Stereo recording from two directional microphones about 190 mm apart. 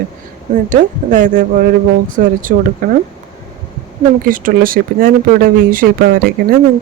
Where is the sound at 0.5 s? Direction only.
45° right (ahead or behind).